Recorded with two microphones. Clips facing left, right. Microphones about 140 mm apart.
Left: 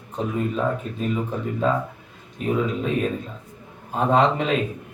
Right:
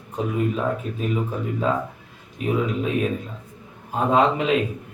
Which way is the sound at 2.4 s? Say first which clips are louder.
Even; 5° right (ahead or behind).